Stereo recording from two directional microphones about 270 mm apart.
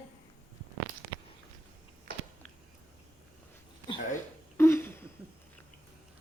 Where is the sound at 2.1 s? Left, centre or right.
Right.